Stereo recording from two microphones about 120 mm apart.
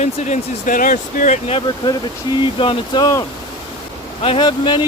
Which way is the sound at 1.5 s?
40° left (ahead or behind).